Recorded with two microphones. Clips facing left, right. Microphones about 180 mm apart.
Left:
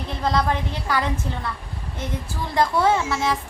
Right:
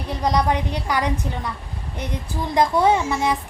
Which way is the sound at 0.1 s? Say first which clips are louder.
Right 2 dB; 15° right (ahead or behind).